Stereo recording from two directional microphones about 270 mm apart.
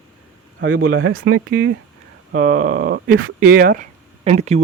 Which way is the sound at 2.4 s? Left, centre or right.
Right.